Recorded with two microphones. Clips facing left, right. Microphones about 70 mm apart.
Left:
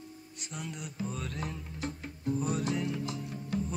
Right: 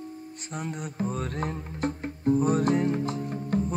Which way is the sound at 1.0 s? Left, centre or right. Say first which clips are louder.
Right 7 dB; right.